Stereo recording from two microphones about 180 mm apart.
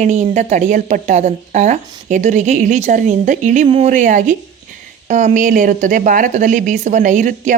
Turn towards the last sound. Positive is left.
turn(degrees=-45)  # may be behind; listen again after turning